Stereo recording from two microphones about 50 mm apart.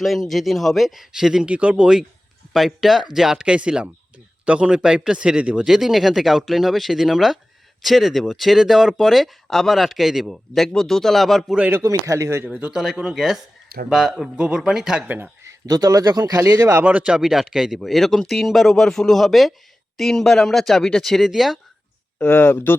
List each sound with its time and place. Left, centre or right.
0.0 s speech: centre
1.1 s speech: centre
1.5 s speech: right
2.5 s speech: centre
3.4 s speech: centre
5.6 s speech: centre
11.8 s a man's voice: right
12.7 s speech: centre
13.0 s speech: centre
16.8 s speech: right
17.2 s speech: centre
17.7 s speech: centre
21.2 s speech: centre
22.2 s speech: left